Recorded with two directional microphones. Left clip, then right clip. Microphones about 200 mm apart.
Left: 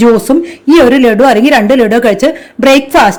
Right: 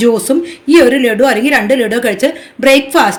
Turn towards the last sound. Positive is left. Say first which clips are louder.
# left 3 dB
turn(degrees=45)  # may be behind; listen again after turning